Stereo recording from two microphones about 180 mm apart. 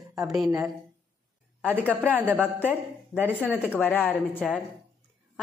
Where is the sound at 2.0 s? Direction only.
10° right (ahead or behind).